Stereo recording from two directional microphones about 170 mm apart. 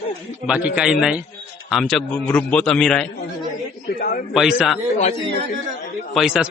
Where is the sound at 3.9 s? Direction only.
55° left (ahead or behind).